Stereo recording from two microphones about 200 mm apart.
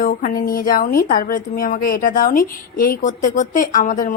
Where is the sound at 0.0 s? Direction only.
45° left (ahead or behind).